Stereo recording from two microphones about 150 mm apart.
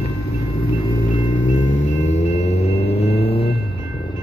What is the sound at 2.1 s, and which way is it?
Music, 50° left (ahead or behind).